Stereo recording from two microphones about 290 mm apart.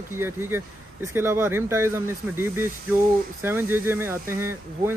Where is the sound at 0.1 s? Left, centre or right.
Centre.